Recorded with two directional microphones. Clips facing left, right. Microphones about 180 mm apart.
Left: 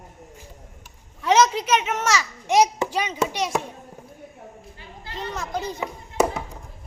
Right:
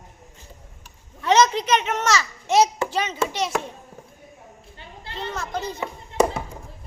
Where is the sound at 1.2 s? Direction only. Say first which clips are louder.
Even; 10° left (ahead or behind).